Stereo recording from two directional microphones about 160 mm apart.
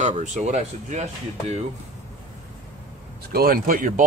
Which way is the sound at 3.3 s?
65° right (ahead or behind).